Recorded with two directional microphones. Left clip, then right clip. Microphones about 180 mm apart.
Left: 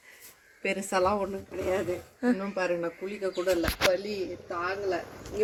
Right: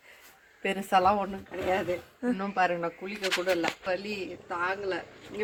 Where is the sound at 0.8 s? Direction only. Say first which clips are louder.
Right 4 dB; 20° right (ahead or behind).